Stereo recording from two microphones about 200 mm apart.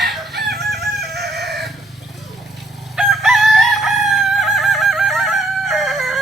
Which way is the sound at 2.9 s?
Centre (ahead or behind).